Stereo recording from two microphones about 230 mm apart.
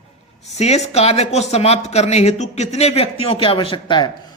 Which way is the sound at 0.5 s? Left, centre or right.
Left.